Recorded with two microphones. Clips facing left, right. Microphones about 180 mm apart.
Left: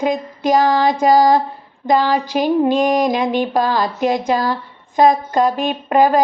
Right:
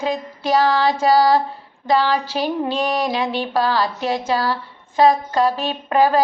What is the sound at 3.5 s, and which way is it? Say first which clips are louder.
Speech: left 2 dB; 15° left (ahead or behind).